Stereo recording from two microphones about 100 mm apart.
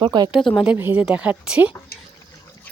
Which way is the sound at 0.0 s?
50° right (ahead or behind).